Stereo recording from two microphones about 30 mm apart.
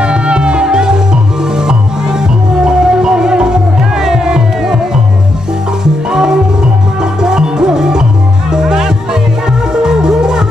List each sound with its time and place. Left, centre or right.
0.0 s music: right
6.0 s music: right